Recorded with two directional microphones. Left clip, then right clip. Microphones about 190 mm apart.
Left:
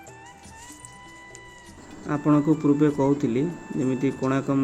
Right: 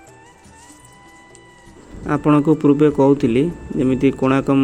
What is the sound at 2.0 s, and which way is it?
Speech, 25° right (ahead or behind).